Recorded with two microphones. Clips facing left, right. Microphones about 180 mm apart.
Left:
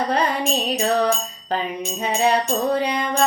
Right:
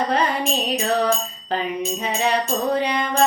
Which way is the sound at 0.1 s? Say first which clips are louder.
Even; 40° left (ahead or behind).